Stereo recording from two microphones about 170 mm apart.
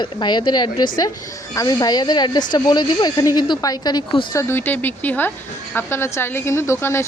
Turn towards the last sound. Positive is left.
turn(degrees=15)  # may be behind; listen again after turning